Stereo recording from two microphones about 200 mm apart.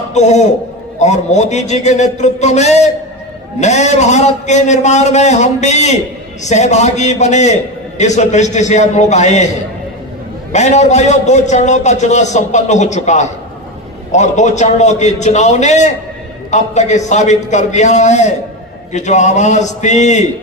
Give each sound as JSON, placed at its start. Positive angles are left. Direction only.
{"t": 0.1, "sound": "a man's voice", "side_deg": 35}
{"t": 10.5, "sound": "a man's voice", "side_deg": 35}